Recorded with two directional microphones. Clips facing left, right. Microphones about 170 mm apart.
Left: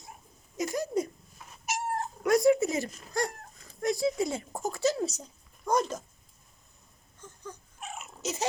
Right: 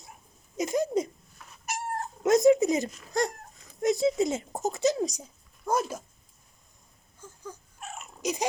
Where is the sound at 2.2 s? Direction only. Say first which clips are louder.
Right 3 dB; 20° right (ahead or behind).